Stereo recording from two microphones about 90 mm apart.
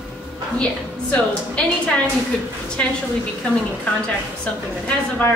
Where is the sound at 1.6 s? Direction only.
15° left (ahead or behind).